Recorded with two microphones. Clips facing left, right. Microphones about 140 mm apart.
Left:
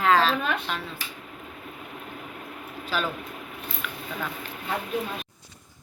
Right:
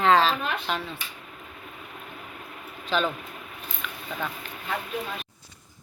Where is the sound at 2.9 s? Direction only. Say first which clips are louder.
Right 3 dB; 5° left (ahead or behind).